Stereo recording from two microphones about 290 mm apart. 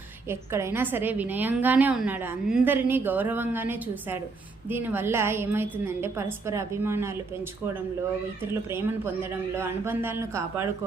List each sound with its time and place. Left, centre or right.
0.3 s a woman's voice: centre
9.3 s a woman's voice: centre